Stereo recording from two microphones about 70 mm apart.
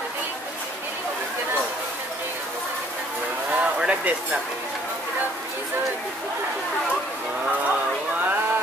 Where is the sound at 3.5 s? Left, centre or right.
Centre.